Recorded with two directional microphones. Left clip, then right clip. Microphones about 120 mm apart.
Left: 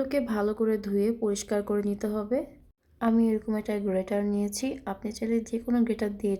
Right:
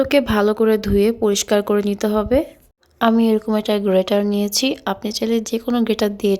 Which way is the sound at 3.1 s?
55° right (ahead or behind).